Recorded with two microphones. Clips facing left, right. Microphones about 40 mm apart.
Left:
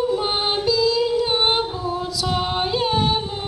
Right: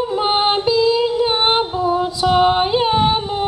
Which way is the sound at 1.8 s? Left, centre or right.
Right.